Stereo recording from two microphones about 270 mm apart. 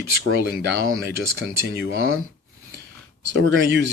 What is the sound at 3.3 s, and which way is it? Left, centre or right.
Speech, right.